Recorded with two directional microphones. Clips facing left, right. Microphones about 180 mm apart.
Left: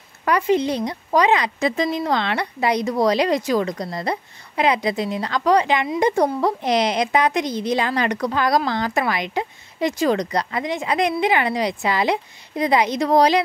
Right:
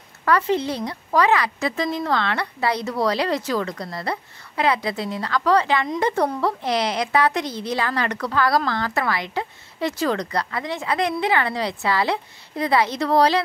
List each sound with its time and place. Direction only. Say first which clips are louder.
0.2 s a woman's voice: left 2 dB; 15° left (ahead or behind)